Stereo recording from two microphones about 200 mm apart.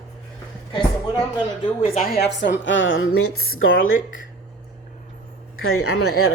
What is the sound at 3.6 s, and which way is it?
Speech, 75° left (ahead or behind).